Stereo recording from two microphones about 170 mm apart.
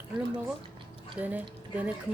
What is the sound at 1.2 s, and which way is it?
Speech, 10° right (ahead or behind).